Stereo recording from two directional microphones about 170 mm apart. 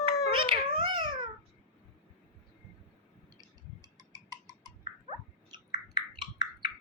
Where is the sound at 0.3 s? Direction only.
30° right (ahead or behind).